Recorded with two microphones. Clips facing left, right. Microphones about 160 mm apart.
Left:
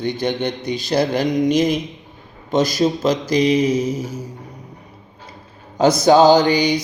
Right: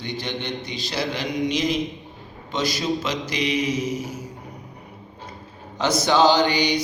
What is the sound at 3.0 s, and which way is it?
Mantra, 40° left (ahead or behind).